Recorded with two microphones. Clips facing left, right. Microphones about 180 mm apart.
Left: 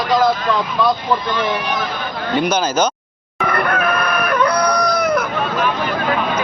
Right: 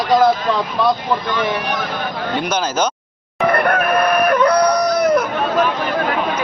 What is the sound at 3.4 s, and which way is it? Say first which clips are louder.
Chicken: right 3 dB; 35° right (ahead or behind).